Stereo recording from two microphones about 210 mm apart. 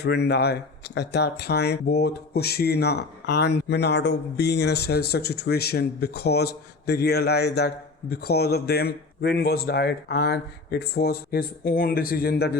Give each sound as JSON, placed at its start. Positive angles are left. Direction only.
{"t": 0.0, "sound": "speech", "side_deg": 50}